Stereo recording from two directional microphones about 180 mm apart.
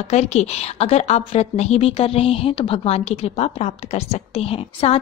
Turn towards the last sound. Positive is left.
turn(degrees=35)  # may be behind; listen again after turning